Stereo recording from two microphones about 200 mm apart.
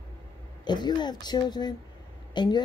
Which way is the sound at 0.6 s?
20° left (ahead or behind).